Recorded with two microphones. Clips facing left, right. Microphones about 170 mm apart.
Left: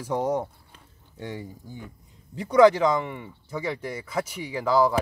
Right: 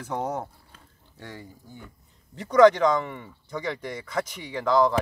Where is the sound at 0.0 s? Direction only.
10° left (ahead or behind).